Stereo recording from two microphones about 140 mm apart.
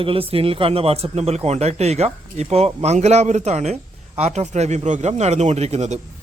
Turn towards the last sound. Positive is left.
turn(degrees=-55)  # may be behind; listen again after turning